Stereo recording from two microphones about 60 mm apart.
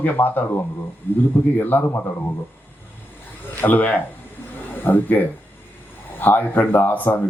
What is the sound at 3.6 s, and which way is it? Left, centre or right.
Speech, left.